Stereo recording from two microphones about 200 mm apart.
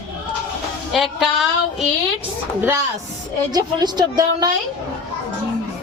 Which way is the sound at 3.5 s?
20° right (ahead or behind).